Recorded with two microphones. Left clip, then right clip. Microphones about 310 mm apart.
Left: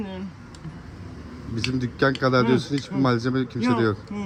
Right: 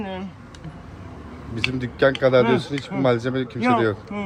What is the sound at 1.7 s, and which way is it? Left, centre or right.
Speech, centre.